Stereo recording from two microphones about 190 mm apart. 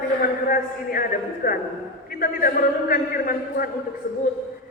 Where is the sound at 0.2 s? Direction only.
50° left (ahead or behind).